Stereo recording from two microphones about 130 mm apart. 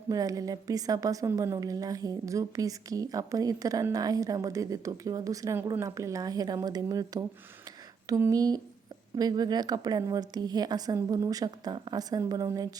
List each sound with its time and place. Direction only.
0.1 s a woman's voice: 25° right (ahead or behind)